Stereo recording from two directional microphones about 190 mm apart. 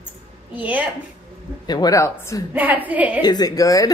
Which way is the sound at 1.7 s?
20° left (ahead or behind).